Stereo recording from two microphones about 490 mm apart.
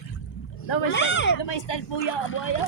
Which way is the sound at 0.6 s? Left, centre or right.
Left.